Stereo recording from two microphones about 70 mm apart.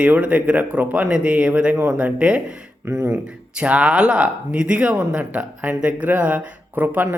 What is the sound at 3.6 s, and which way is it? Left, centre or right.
Speech, centre.